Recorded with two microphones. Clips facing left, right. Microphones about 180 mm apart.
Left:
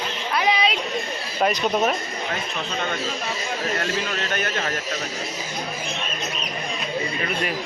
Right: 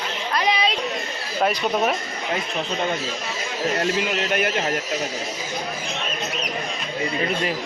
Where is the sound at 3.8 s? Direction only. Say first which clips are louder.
Right 4 dB; 20° right (ahead or behind).